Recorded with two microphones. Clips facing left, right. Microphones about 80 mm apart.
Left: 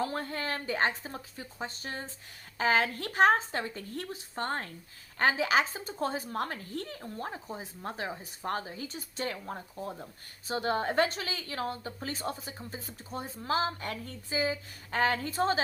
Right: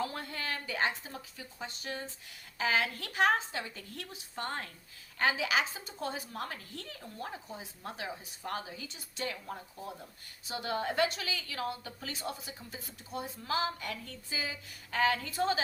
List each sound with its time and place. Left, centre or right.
0.0 s a woman's voice: left